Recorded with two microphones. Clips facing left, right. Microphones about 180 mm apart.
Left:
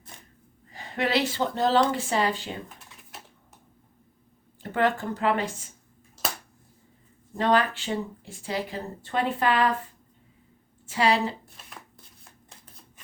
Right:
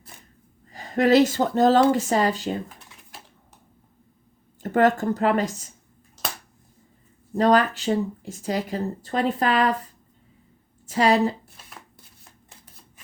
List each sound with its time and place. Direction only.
0.1 s gasp: 5° right (ahead or behind)
0.7 s a woman's voice: 40° right (ahead or behind)
4.6 s speech: 45° right (ahead or behind)
7.3 s speech: 40° right (ahead or behind)